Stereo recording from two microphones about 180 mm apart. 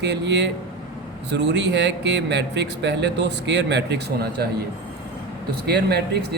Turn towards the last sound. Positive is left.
turn(degrees=-60)  # may be behind; listen again after turning